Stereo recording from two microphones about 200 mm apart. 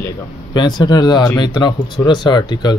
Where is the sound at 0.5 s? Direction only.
20° left (ahead or behind).